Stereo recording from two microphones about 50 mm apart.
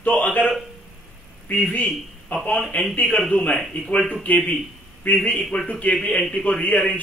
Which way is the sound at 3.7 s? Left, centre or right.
Left.